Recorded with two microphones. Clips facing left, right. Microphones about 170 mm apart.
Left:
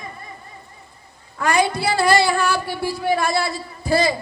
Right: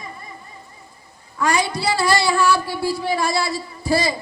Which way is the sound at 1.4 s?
55° left (ahead or behind).